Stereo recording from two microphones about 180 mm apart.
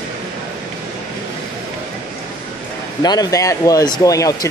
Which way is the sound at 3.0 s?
20° left (ahead or behind).